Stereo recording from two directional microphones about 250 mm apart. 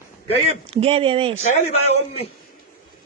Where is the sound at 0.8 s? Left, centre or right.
Right.